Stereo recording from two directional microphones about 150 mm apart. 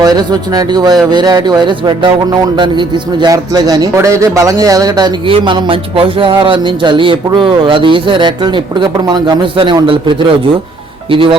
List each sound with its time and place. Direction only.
0.0 s speech: 25° right (ahead or behind)
11.1 s speech: 35° right (ahead or behind)